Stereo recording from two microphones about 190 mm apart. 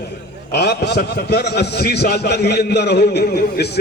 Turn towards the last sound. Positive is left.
turn(degrees=60)  # may be behind; listen again after turning